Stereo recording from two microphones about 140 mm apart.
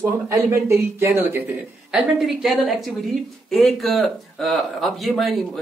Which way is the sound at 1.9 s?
Centre (ahead or behind).